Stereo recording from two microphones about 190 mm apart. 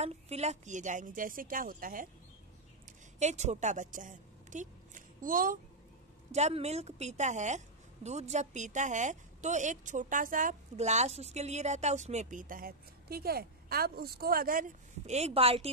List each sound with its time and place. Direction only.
0.0 s a woman's voice: 35° right (ahead or behind)
3.2 s a woman's voice: 35° right (ahead or behind)
6.3 s a woman's voice: 35° right (ahead or behind)